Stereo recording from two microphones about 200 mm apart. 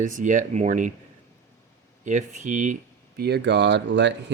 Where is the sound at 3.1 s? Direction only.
55° right (ahead or behind).